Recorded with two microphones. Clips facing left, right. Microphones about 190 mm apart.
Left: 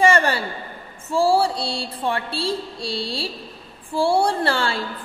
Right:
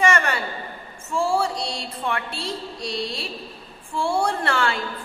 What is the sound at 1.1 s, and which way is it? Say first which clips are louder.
A woman's voice: left 4 dB; 35° left (ahead or behind).